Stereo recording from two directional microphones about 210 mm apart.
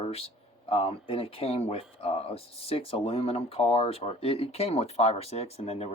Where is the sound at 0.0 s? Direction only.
30° left (ahead or behind).